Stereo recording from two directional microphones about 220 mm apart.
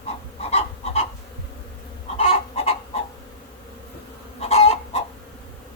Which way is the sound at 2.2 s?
25° left (ahead or behind).